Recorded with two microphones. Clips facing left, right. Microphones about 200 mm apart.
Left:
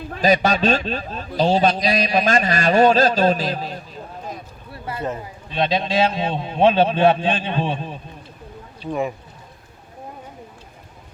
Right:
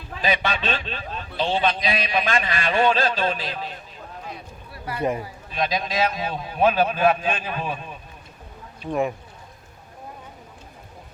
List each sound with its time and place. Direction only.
0.1 s a man's voice: 40° left (ahead or behind)
4.7 s a sound: 25° left (ahead or behind)
5.2 s a man's voice: 30° left (ahead or behind)
8.9 s speech: centre (ahead or behind)